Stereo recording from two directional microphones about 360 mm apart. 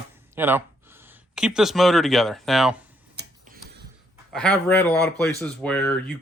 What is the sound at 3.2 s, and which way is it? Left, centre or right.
Tick-tock, right.